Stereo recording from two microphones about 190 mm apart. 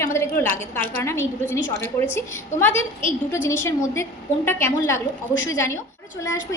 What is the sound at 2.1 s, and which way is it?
A woman's voice, 10° left (ahead or behind).